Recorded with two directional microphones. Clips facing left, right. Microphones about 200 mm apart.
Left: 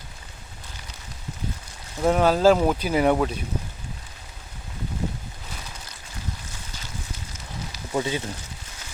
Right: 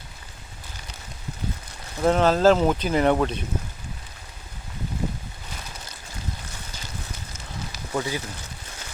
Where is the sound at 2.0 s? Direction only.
10° left (ahead or behind).